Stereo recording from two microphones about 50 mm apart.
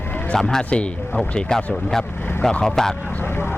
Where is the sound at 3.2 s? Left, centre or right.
Left.